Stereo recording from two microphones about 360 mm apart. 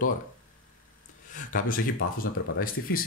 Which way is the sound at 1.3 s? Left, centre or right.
Left.